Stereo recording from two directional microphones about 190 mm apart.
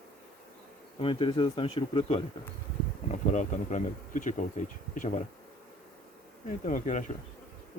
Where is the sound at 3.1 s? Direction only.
40° left (ahead or behind).